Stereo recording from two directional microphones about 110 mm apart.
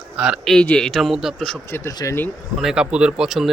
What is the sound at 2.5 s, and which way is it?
Speech, 5° right (ahead or behind).